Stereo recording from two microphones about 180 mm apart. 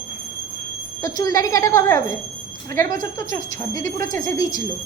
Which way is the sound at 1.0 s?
20° left (ahead or behind).